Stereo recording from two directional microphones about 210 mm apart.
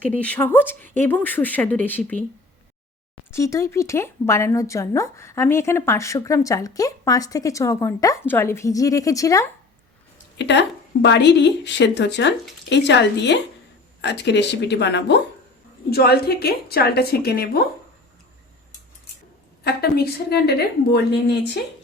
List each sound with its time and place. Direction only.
0.2 s speech: 5° left (ahead or behind)
3.3 s speech: 15° left (ahead or behind)
10.3 s a woman's voice: 55° left (ahead or behind)
19.6 s a woman's voice: 50° left (ahead or behind)